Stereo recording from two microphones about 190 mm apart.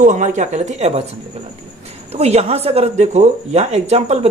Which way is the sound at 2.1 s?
35° right (ahead or behind).